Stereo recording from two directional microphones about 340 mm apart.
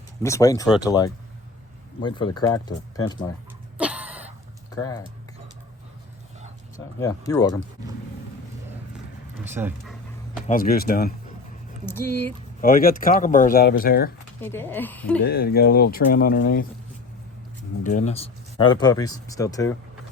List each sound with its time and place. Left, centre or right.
0.2 s speech: centre
3.8 s a sound: centre
4.7 s speech: centre
6.7 s speech: centre
9.4 s speech: centre
10.4 s speech: left
11.9 s speech: centre
12.6 s speech: left
14.4 s speech: centre
15.2 s speech: left
17.8 s speech: left